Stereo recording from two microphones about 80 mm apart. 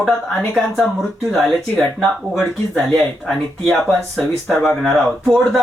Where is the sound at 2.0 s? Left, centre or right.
Centre.